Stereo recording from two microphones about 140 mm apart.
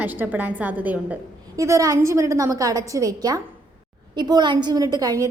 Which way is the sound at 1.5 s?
20° right (ahead or behind).